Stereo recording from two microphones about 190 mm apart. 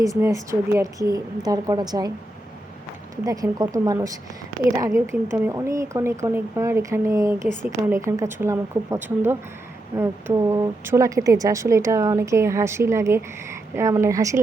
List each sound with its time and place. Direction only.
0.0 s speech: 15° right (ahead or behind)
3.2 s speech: 20° right (ahead or behind)